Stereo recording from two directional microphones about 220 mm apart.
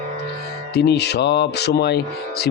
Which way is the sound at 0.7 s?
50° left (ahead or behind).